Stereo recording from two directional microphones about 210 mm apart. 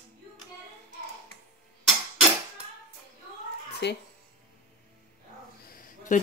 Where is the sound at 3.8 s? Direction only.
55° left (ahead or behind).